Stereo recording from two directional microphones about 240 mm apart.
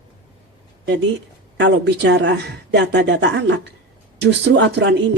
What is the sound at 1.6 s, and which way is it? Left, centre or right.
Speech, right.